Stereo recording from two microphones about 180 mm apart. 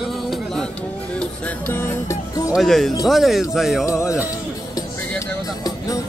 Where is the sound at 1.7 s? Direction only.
15° left (ahead or behind).